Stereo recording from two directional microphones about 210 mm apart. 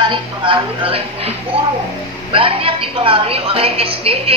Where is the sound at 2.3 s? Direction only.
25° right (ahead or behind).